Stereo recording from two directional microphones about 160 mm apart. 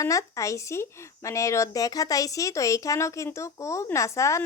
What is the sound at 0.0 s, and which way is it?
Speech, 20° left (ahead or behind).